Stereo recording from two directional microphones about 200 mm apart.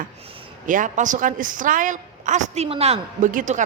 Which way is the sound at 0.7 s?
40° right (ahead or behind).